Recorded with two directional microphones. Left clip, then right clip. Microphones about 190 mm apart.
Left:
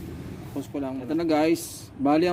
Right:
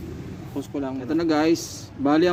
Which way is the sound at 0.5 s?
5° left (ahead or behind).